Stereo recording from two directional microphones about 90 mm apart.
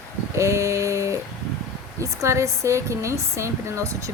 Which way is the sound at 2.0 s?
35° right (ahead or behind).